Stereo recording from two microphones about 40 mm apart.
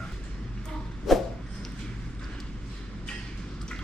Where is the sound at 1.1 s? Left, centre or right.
Centre.